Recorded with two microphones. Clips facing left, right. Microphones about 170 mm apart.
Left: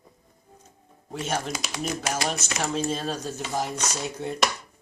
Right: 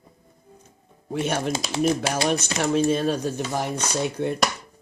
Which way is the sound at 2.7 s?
60° right (ahead or behind).